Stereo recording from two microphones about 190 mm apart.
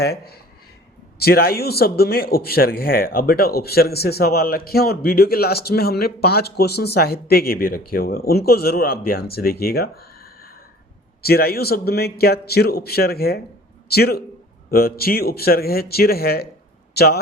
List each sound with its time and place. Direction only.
0.0 s a man's voice: 55° left (ahead or behind)